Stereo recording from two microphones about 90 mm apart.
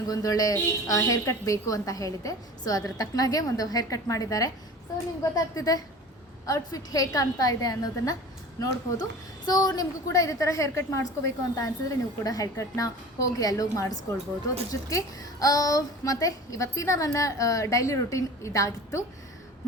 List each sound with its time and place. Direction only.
0.1 s a woman's voice: 40° left (ahead or behind)